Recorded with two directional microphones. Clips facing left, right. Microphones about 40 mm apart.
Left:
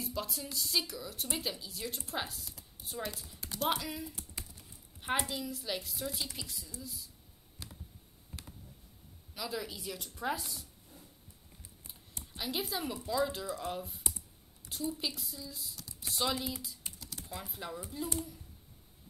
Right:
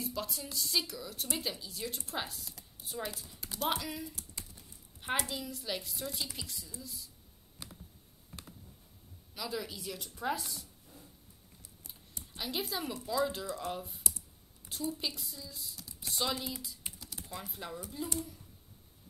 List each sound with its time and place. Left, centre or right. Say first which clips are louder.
0.0 s a woman's voice: even; centre
4.1 s typing: left 1 dB; centre
5.3 s a woman's voice: left 1 dB; centre
7.6 s computer keyboard: even; centre
9.3 s a woman's voice: even; centre
17.0 s typing: left 1 dB; centre